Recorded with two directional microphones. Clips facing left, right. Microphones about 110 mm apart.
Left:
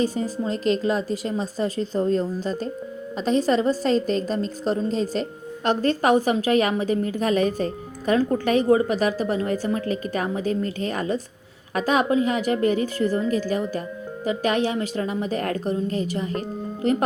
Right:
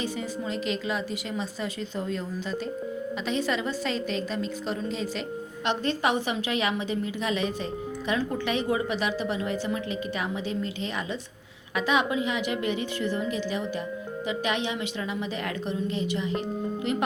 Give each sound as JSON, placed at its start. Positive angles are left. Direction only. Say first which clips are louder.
{"t": 0.0, "sound": "a woman's voice", "louder": "left 7 dB", "side_deg": 40}